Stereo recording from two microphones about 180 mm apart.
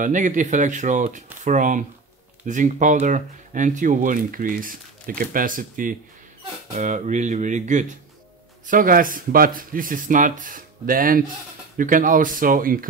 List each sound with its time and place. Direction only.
0.0 s speech: 45° right (ahead or behind)